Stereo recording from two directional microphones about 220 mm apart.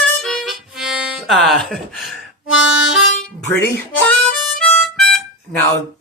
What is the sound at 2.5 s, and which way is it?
Harmonica, 55° left (ahead or behind).